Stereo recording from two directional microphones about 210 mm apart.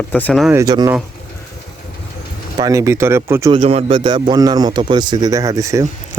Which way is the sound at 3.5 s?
25° right (ahead or behind).